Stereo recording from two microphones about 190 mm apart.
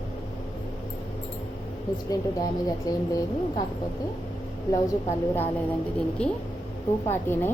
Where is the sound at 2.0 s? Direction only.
20° left (ahead or behind).